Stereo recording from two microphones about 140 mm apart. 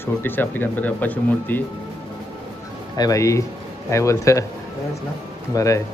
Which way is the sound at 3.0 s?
25° left (ahead or behind).